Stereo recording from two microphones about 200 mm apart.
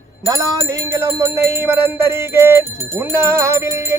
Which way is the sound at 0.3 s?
15° right (ahead or behind).